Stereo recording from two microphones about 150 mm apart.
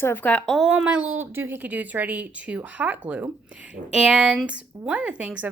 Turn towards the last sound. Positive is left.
turn(degrees=-10)  # may be behind; listen again after turning